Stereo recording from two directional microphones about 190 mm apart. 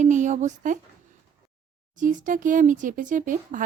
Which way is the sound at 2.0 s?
45° right (ahead or behind).